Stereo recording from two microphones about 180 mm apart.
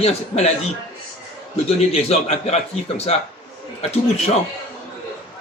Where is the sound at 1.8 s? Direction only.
35° left (ahead or behind).